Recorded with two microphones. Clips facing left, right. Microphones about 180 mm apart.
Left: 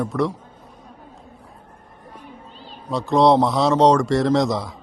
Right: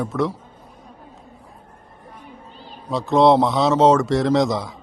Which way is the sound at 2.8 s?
Centre (ahead or behind).